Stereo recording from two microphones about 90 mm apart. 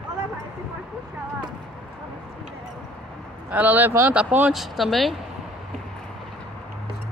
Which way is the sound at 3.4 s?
15° right (ahead or behind).